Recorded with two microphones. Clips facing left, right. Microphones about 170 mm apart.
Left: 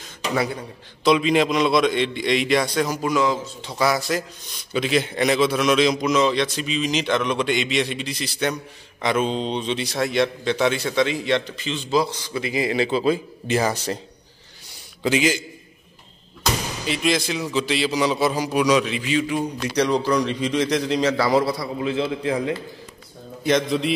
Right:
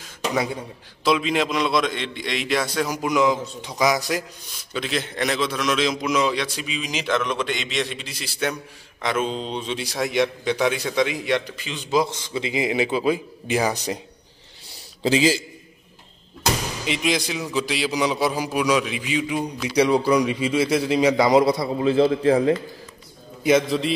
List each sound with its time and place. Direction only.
0.6 s a man's voice: centre (ahead or behind)
4.7 s a man's voice: 5° left (ahead or behind); by 14.0 s 15° right (ahead or behind)
15.0 s a man's voice: 35° right (ahead or behind)
16.8 s a man's voice: 15° right (ahead or behind)
21.8 s a man's voice: 35° right (ahead or behind)
23.4 s a man's voice: 5° right (ahead or behind)